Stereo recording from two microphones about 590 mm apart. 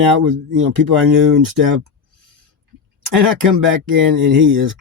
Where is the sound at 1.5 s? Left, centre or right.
Right.